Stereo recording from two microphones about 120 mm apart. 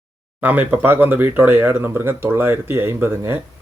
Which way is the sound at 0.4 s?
15° right (ahead or behind).